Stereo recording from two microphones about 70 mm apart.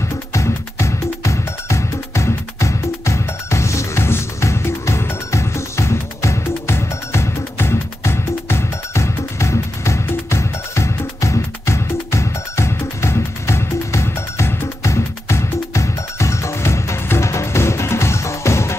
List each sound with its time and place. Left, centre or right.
0.3 s music: left